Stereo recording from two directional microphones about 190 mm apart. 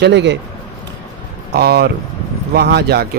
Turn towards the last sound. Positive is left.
turn(degrees=-55)  # may be behind; listen again after turning